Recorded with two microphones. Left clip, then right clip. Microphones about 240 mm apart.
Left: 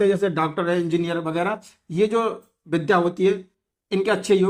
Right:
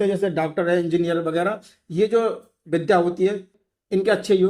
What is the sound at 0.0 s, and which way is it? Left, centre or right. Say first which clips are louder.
Speech: left 1 dB; left.